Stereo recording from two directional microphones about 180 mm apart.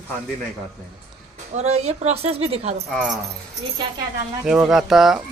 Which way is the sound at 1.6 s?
35° right (ahead or behind).